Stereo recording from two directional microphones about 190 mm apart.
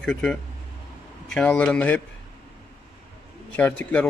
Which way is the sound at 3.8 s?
5° left (ahead or behind).